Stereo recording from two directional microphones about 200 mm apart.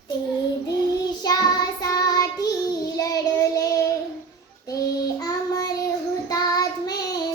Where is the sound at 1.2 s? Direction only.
20° left (ahead or behind).